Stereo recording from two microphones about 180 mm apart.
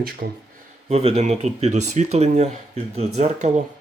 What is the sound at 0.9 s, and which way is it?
Speech, 35° right (ahead or behind).